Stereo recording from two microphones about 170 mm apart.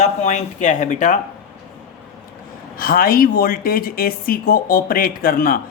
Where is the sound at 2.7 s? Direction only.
60° left (ahead or behind).